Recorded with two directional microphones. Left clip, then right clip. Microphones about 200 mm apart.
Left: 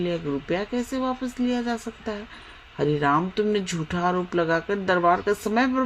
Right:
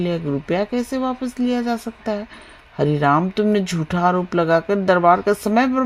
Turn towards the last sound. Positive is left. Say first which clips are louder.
# right 5 dB
turn(degrees=-40)  # may be behind; listen again after turning